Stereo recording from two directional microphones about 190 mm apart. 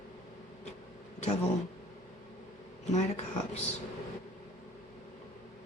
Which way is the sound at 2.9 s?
35° left (ahead or behind).